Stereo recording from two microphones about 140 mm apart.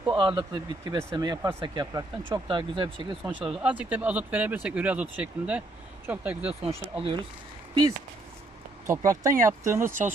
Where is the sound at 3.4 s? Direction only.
5° right (ahead or behind).